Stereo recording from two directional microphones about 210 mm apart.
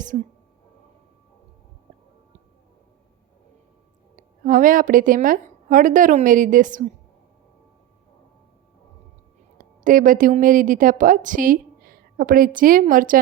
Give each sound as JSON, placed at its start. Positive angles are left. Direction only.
{"t": 4.4, "sound": "a woman's voice", "side_deg": -40}
{"t": 9.8, "sound": "a woman's voice", "side_deg": -40}